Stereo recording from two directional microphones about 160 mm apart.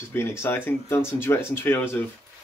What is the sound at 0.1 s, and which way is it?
Speech, 15° left (ahead or behind).